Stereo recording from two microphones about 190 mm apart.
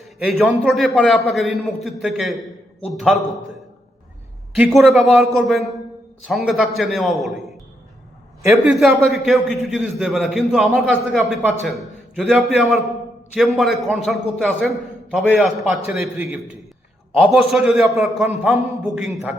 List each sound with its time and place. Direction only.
0.0 s a man's voice: centre (ahead or behind)
4.5 s a man's voice: 5° right (ahead or behind)
8.4 s a man's voice: centre (ahead or behind)